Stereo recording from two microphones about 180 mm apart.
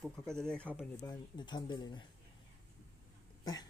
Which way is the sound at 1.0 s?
25° left (ahead or behind).